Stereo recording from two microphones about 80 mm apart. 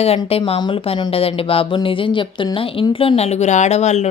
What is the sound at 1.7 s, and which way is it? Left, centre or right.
A woman's voice, left.